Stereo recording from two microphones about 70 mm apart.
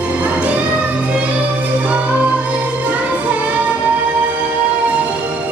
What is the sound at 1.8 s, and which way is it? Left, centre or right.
Music, right.